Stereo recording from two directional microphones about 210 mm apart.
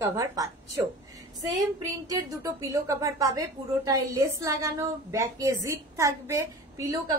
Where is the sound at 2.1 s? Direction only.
15° right (ahead or behind).